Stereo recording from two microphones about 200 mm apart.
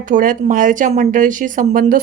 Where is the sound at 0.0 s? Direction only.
40° right (ahead or behind).